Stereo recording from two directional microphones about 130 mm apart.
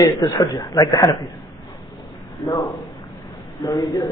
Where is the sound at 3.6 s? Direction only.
30° left (ahead or behind).